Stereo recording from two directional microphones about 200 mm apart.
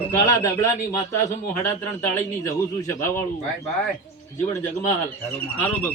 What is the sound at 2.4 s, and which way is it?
Speech, 15° left (ahead or behind).